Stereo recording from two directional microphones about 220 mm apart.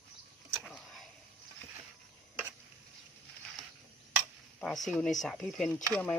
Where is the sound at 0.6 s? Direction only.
Centre (ahead or behind).